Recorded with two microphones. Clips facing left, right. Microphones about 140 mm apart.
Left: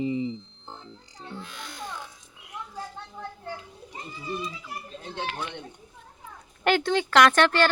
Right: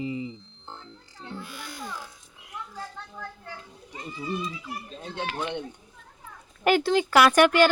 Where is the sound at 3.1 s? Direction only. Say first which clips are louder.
Left 3 dB; 25° left (ahead or behind).